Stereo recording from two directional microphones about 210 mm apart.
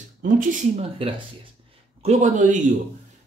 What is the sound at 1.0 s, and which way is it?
Speech, 25° right (ahead or behind).